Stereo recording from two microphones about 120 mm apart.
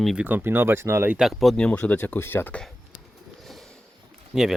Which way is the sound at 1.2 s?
Centre (ahead or behind).